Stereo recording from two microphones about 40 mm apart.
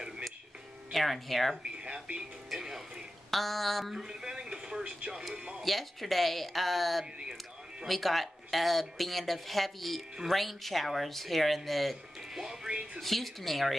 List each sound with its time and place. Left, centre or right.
0.9 s speech: centre
1.6 s speech: right
2.5 s speech: centre
4.0 s speech: centre
5.3 s speech: right
5.6 s speech: centre
12.6 s speech: right
13.0 s speech: centre